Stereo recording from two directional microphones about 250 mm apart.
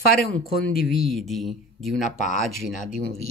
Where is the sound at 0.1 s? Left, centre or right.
Left.